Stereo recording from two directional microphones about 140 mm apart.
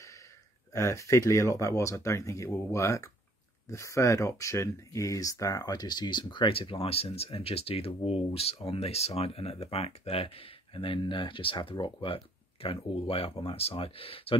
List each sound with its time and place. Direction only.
0.7 s speech: 20° left (ahead or behind); by 14.4 s 40° left (ahead or behind)